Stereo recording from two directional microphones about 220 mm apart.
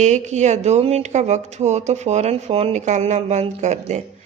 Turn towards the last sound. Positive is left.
turn(degrees=-30)  # may be behind; listen again after turning